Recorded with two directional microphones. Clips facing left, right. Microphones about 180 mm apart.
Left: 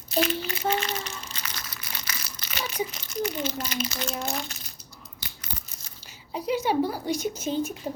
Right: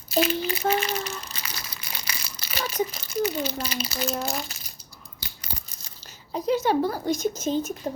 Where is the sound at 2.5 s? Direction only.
35° right (ahead or behind).